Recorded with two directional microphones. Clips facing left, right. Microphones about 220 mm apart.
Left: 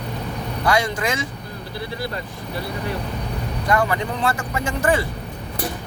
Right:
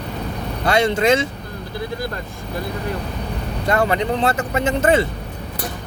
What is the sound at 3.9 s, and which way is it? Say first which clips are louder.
Speech: right 4 dB; 25° right (ahead or behind).